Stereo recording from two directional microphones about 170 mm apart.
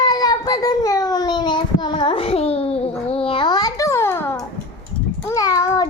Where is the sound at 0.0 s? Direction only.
25° left (ahead or behind).